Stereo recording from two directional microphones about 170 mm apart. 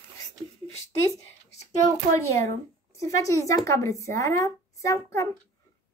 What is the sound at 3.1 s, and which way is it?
A woman's voice, 20° left (ahead or behind).